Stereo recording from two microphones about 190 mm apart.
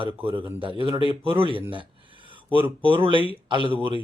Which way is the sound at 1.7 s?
25° right (ahead or behind).